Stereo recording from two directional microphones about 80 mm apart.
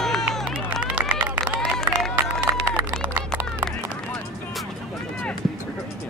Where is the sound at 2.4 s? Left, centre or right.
Right.